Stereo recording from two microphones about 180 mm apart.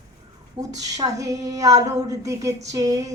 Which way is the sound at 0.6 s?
20° right (ahead or behind).